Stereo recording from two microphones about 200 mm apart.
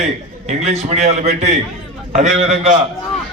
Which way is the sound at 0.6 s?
35° right (ahead or behind).